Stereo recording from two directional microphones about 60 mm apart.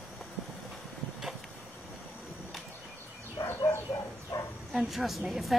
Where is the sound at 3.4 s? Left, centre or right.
Left.